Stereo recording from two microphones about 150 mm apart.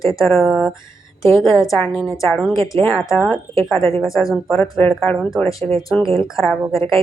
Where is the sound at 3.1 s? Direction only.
Centre (ahead or behind).